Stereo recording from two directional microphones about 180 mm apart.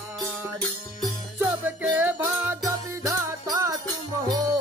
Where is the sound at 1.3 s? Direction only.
10° right (ahead or behind).